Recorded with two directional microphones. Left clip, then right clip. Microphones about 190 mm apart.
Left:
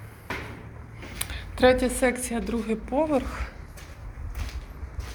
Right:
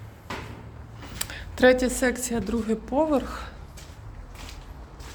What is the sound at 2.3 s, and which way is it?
Speech, 30° right (ahead or behind).